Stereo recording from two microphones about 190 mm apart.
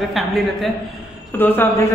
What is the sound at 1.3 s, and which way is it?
Speech, 10° left (ahead or behind).